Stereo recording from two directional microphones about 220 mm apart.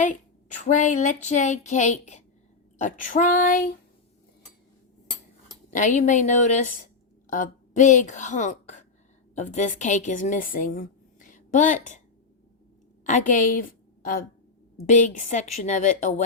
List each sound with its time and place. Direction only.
0.6 s speech: 35° left (ahead or behind)
5.7 s a woman's voice: 35° left (ahead or behind)
13.1 s a woman's voice: 35° left (ahead or behind)